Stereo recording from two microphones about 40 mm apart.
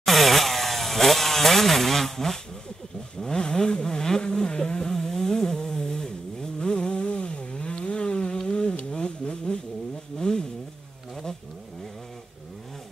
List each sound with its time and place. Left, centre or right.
0.0 s chainsaw: centre
3.2 s vehicle: centre
8.9 s a sound: left
10.1 s vehicle: centre